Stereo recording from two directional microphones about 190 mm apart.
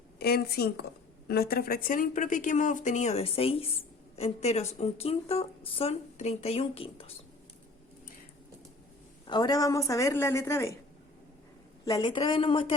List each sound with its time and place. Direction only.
0.2 s a woman's voice: 55° left (ahead or behind); by 7.2 s 30° left (ahead or behind)
9.2 s a woman's voice: 20° left (ahead or behind)
11.9 s a woman's voice: 20° left (ahead or behind)